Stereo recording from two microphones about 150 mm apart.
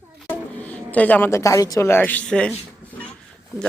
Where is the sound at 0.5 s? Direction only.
10° left (ahead or behind).